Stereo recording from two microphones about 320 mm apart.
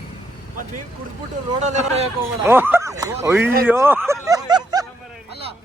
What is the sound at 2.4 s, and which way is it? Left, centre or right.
Speech, centre.